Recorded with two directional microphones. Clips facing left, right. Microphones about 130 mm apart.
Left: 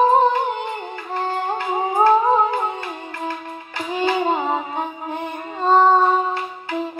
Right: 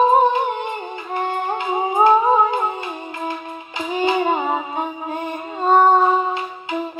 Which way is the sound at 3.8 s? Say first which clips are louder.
Right 1 dB; 20° right (ahead or behind).